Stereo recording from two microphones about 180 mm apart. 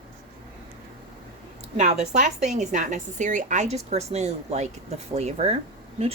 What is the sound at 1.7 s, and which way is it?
A woman's voice, 40° right (ahead or behind).